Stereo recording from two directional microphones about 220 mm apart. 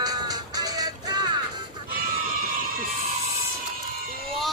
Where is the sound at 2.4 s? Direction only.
40° right (ahead or behind).